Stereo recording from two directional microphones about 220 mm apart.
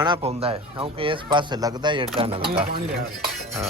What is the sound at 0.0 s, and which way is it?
Speech, 20° right (ahead or behind).